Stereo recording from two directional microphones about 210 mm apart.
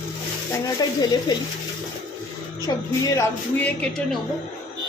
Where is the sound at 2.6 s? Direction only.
15° left (ahead or behind).